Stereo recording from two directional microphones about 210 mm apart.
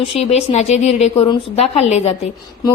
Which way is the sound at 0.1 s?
30° left (ahead or behind).